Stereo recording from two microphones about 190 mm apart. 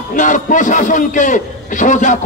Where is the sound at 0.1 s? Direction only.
40° left (ahead or behind).